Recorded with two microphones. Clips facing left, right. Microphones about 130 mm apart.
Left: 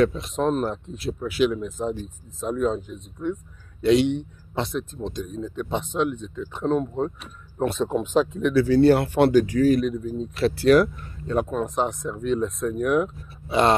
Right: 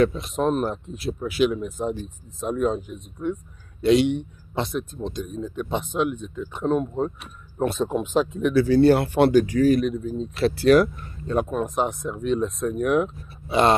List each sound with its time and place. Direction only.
0.0 s a man's voice: 10° right (ahead or behind)
9.6 s a man's voice: 20° right (ahead or behind)